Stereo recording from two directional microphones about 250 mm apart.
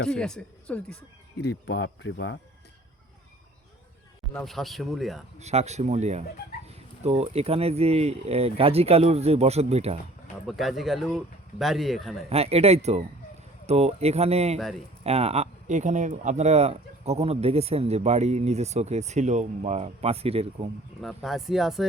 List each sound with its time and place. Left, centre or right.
0.2 s a man's voice: centre
1.4 s speech: left
4.4 s a man's voice: centre
5.4 s speech: right
10.4 s a man's voice: centre
12.3 s speech: right
21.0 s a man's voice: centre